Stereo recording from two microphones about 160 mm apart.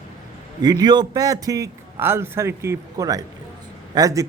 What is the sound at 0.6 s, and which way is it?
A man's voice, 25° right (ahead or behind).